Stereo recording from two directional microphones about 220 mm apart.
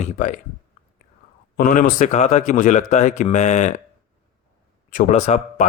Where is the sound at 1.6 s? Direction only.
40° left (ahead or behind).